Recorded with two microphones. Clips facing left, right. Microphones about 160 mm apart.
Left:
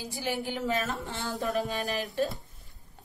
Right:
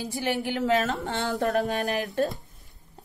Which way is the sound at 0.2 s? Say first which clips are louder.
Right 4 dB; 70° right (ahead or behind).